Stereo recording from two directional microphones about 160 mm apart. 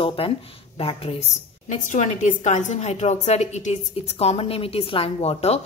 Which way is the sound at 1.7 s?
50° left (ahead or behind).